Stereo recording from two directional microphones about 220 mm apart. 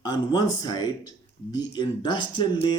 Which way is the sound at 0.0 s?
20° left (ahead or behind).